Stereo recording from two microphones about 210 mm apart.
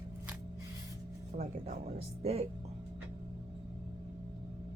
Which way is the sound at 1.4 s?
30° right (ahead or behind).